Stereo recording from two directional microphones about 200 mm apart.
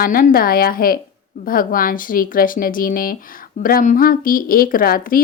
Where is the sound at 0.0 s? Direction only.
45° left (ahead or behind).